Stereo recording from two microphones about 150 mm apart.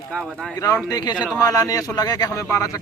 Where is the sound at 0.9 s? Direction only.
25° left (ahead or behind).